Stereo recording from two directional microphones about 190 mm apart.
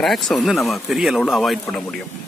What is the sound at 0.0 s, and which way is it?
Speech, centre (ahead or behind).